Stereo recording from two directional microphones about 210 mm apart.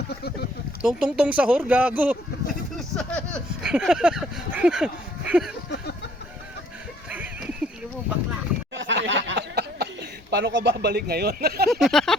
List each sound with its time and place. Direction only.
0.1 s speech: 50° left (ahead or behind)
0.8 s speech: centre (ahead or behind)
2.7 s a sound: 5° left (ahead or behind)
7.1 s a sound: 5° right (ahead or behind)
8.7 s chuckle: 60° right (ahead or behind)
11.7 s speech: centre (ahead or behind)